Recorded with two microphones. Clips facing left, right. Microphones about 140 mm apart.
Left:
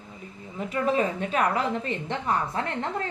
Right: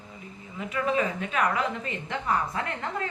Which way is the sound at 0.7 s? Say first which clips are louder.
Left 2 dB; 35° left (ahead or behind).